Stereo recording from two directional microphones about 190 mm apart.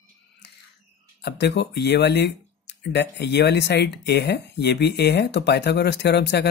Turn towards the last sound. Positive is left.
turn(degrees=60)  # may be behind; listen again after turning